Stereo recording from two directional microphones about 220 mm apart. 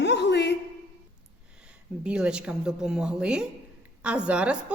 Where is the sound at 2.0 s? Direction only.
5° right (ahead or behind).